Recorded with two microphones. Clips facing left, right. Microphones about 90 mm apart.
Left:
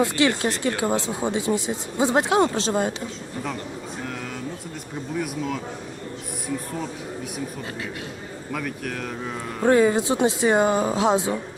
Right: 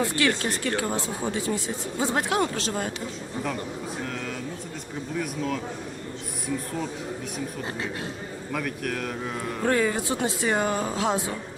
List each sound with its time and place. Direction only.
0.0 s speech: 20° left (ahead or behind)
5.1 s speech: 5° left (ahead or behind)
8.5 s speech: centre (ahead or behind)
9.6 s speech: 20° left (ahead or behind)